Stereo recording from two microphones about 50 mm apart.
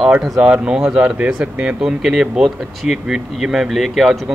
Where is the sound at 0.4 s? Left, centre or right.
Right.